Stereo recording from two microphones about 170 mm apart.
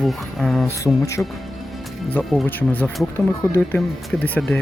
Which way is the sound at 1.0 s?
20° left (ahead or behind).